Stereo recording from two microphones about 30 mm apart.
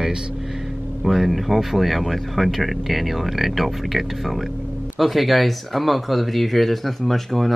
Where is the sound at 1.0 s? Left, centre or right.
Centre.